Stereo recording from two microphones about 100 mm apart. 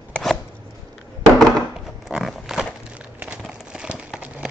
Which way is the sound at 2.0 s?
Centre (ahead or behind).